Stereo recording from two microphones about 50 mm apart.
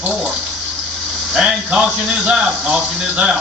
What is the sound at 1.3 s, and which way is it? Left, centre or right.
A man's voice, centre.